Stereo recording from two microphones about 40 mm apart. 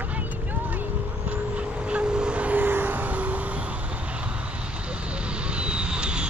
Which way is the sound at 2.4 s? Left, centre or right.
Right.